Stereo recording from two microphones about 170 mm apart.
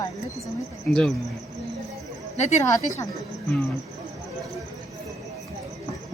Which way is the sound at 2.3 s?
40° left (ahead or behind).